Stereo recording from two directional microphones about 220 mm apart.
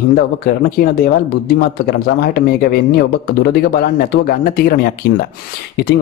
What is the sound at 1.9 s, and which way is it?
Speech, 45° left (ahead or behind).